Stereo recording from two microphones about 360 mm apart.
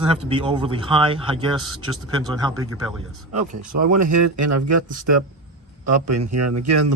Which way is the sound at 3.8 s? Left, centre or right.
Right.